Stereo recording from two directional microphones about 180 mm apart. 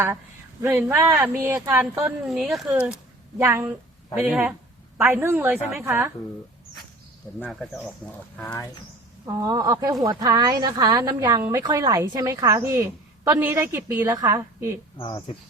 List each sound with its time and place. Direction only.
0.6 s a woman's voice: 15° right (ahead or behind)
2.2 s a woman's voice: centre (ahead or behind)
4.1 s a woman's voice: 5° right (ahead or behind)
7.3 s speech: 10° left (ahead or behind)
9.2 s a woman's voice: 20° right (ahead or behind)